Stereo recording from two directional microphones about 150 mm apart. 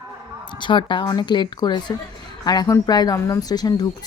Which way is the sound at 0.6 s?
35° left (ahead or behind).